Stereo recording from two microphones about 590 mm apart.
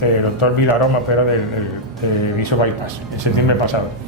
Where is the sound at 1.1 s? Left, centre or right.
Left.